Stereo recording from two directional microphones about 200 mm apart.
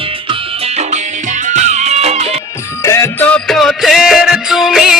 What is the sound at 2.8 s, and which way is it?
Music, 15° left (ahead or behind).